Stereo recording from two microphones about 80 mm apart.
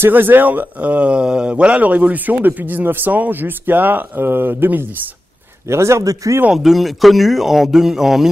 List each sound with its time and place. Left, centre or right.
0.0 s a man's voice: right
6.5 s a man's voice: centre